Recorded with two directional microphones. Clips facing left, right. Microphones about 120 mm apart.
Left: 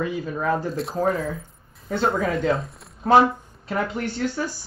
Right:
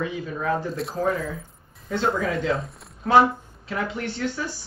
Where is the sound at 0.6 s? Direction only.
Centre (ahead or behind).